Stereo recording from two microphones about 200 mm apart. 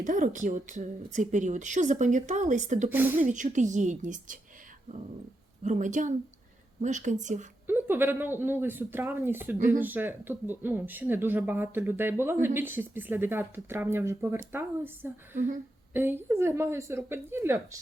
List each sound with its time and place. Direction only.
0.0 s a woman's voice: 40° right (ahead or behind)
2.9 s speech: 10° right (ahead or behind)
3.2 s a woman's voice: 40° right (ahead or behind)
5.6 s a woman's voice: 40° right (ahead or behind)
7.7 s speech: 10° right (ahead or behind)